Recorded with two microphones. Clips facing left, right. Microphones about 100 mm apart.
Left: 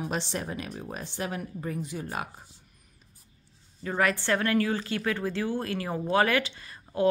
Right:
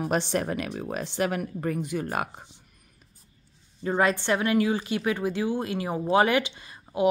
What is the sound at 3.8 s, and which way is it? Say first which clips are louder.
A woman's voice: right 3 dB; 25° right (ahead or behind).